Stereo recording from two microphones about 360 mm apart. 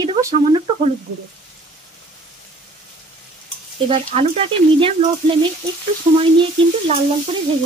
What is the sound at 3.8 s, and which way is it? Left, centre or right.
A woman's voice, centre.